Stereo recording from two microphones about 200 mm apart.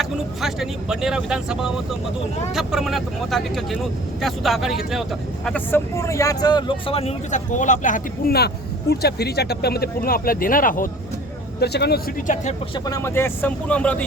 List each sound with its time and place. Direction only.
0.0 s speech: centre (ahead or behind)
5.5 s speech: 10° left (ahead or behind); by 10.8 s 45° left (ahead or behind)
11.6 s speech: 55° left (ahead or behind)
12.3 s speech: 40° left (ahead or behind)
12.7 s speech: 15° left (ahead or behind)